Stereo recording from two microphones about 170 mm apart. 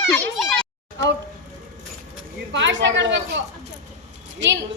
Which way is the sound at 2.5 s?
90° right.